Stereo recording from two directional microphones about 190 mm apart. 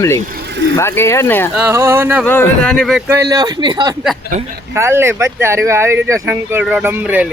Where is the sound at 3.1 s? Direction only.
20° right (ahead or behind).